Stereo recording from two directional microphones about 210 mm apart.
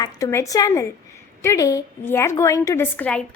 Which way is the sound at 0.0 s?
15° left (ahead or behind).